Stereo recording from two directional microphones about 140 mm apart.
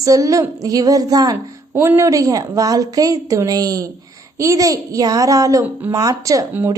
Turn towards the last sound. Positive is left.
turn(degrees=-15)  # may be behind; listen again after turning